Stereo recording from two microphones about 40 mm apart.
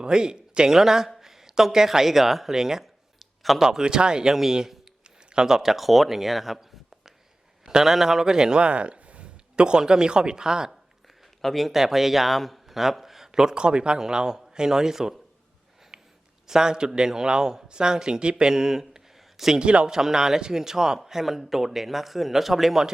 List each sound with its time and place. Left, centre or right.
0.0 s speech: centre
3.6 s speech: centre
7.6 s a sound: centre
7.9 s speech: centre
8.6 s speech: right
11.4 s speech: centre
15.9 s a sound: centre
16.5 s speech: centre
19.5 s speech: right
19.9 s speech: centre